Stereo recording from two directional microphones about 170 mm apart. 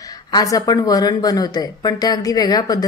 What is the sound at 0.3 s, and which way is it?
Speech, 20° left (ahead or behind).